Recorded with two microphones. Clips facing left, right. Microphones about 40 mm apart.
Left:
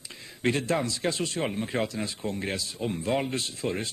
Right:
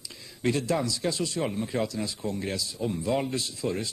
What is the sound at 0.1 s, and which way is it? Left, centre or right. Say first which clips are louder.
Speech: even; left.